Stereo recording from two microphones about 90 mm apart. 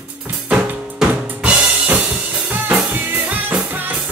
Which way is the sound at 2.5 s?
20° right (ahead or behind).